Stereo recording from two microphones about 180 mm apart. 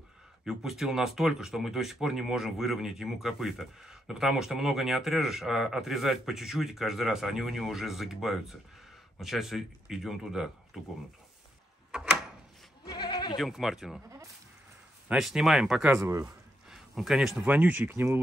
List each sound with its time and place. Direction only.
0.5 s speech: 5° right (ahead or behind)
11.9 s drawer open or close: 5° right (ahead or behind)
12.8 s goat: 25° left (ahead or behind)
13.4 s speech: centre (ahead or behind)
15.0 s speech: centre (ahead or behind)
15.9 s speech: 15° right (ahead or behind)
16.6 s speech: centre (ahead or behind)